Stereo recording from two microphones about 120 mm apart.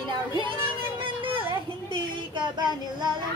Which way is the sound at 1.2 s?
45° right (ahead or behind).